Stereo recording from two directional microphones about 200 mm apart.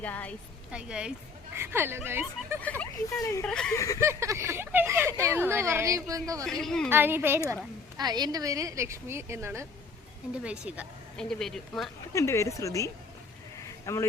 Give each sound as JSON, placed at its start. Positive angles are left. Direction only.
{"t": 0.0, "sound": "speech", "side_deg": 5}
{"t": 0.7, "sound": "speech", "side_deg": -5}
{"t": 3.2, "sound": "speech", "side_deg": 15}
{"t": 3.4, "sound": "speech", "side_deg": 5}
{"t": 3.8, "sound": "speech", "side_deg": 15}
{"t": 4.0, "sound": "speech", "side_deg": -15}
{"t": 6.4, "sound": "speech", "side_deg": 5}
{"t": 6.9, "sound": "speech", "side_deg": -10}
{"t": 12.1, "sound": "speech", "side_deg": 15}
{"t": 13.7, "sound": "a sound", "side_deg": 15}